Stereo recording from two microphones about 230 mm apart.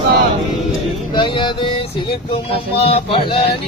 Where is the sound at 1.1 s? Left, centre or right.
Centre.